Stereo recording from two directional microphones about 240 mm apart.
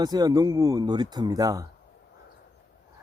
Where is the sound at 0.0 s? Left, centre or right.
Centre.